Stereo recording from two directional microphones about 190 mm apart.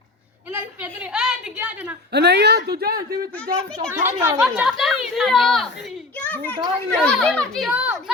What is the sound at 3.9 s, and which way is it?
Speech, 15° right (ahead or behind).